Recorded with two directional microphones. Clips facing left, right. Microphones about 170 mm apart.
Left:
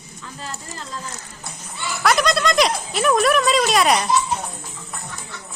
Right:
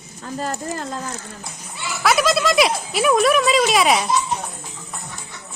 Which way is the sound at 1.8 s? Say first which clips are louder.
Even; centre (ahead or behind).